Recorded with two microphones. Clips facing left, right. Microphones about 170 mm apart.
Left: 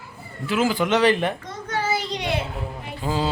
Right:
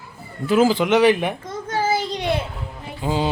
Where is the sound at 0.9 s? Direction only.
10° right (ahead or behind).